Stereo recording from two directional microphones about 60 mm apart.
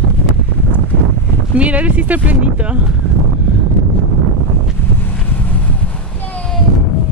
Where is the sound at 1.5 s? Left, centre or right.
Right.